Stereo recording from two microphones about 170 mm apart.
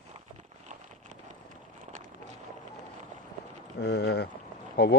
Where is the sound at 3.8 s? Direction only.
70° left (ahead or behind).